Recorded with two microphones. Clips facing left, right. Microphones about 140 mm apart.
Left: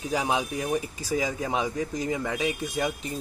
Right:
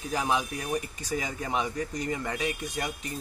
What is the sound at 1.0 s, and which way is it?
Speech, 90° left.